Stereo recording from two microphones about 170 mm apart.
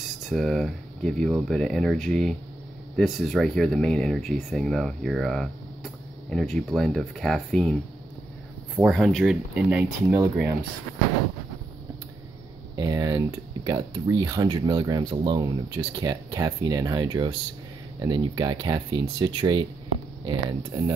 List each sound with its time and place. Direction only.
0.2 s speech: centre (ahead or behind)
8.7 s speech: centre (ahead or behind)
12.7 s speech: 20° right (ahead or behind)